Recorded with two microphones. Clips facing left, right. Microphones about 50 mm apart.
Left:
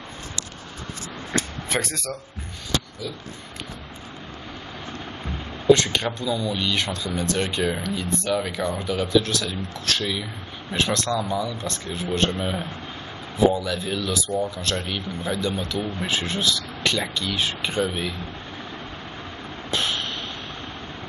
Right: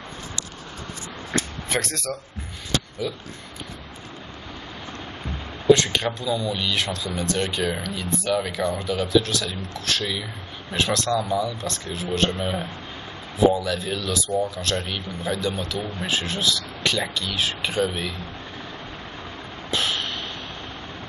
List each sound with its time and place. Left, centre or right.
1.7 s speech: centre
3.0 s speech: centre
5.2 s speech: centre
19.7 s a sound: centre